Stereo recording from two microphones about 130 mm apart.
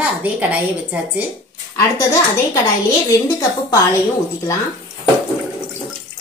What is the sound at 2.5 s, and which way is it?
A woman's voice, 25° left (ahead or behind).